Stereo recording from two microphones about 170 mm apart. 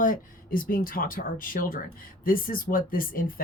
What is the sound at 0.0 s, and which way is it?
Speech, 50° left (ahead or behind).